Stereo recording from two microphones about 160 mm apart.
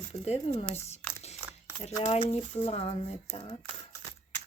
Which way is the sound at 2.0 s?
40° left (ahead or behind).